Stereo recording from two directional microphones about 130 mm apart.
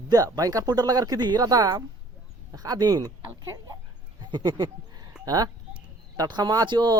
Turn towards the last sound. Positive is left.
turn(degrees=-30)  # may be behind; listen again after turning